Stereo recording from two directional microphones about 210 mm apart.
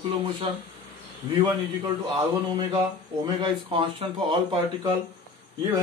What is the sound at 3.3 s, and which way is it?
A man's voice, 20° right (ahead or behind).